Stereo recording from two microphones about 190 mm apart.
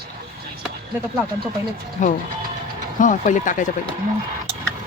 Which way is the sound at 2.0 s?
40° left (ahead or behind).